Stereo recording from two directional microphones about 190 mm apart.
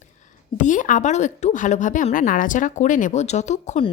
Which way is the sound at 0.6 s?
40° left (ahead or behind).